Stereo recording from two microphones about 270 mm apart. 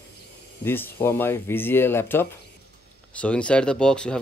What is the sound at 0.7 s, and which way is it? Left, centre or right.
Speech, centre.